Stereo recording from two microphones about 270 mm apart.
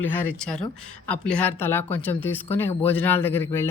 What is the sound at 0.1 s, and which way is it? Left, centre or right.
Speech, centre.